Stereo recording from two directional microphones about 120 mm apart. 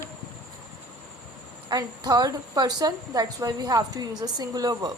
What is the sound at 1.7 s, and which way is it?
A woman's voice, 35° right (ahead or behind).